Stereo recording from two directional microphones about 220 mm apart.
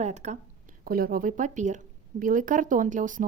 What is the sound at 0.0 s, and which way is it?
Speech, 30° right (ahead or behind).